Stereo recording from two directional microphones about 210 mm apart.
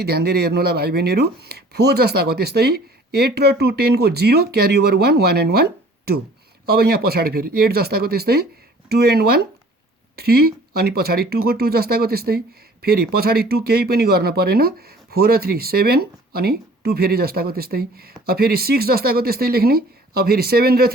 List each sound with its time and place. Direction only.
0.0 s speech: 50° right (ahead or behind)